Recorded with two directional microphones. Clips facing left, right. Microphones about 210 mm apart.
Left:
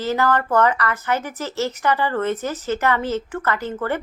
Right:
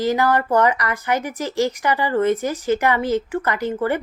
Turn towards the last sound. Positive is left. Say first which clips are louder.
# right 2 dB
turn(degrees=-15)  # may be behind; listen again after turning